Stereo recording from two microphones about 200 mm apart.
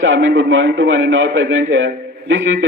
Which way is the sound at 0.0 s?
75° right (ahead or behind).